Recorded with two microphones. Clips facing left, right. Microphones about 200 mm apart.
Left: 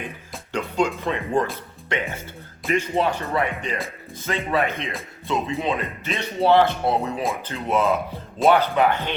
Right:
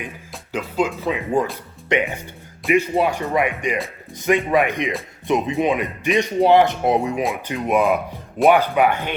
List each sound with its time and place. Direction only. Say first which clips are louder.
0.5 s speech: right 1 dB; 5° right (ahead or behind)